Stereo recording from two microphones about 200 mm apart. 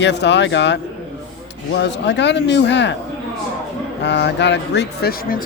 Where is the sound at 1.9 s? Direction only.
60° left (ahead or behind).